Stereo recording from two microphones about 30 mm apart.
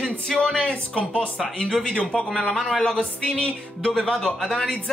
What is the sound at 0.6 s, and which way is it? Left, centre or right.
Speech, left.